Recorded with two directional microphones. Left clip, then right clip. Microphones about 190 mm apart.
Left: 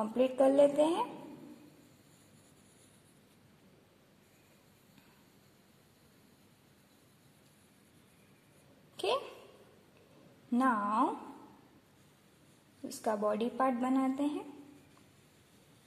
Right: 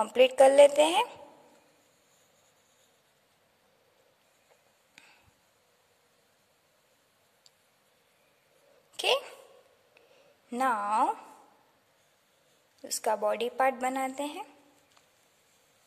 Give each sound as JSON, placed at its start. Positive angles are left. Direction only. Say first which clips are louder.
{"t": 0.0, "sound": "a woman's voice", "louder": "right 8 dB", "side_deg": -45}
{"t": 8.9, "sound": "a sound", "louder": "right 6 dB", "side_deg": -40}
{"t": 10.5, "sound": "a woman's voice", "louder": "right 3 dB", "side_deg": -40}
{"t": 12.8, "sound": "a woman's voice", "louder": "right 4 dB", "side_deg": -40}